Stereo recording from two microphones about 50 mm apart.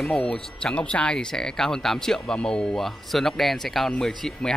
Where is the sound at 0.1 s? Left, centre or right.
Centre.